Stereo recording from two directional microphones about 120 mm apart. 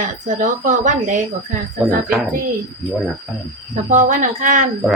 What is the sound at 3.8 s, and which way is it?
Speech, 90° right.